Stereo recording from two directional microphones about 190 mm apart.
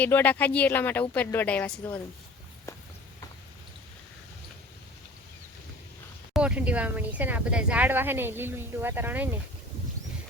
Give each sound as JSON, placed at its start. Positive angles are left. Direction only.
{"t": 0.0, "sound": "speech", "side_deg": 10}
{"t": 2.7, "sound": "walk", "side_deg": 15}
{"t": 6.3, "sound": "speech", "side_deg": -5}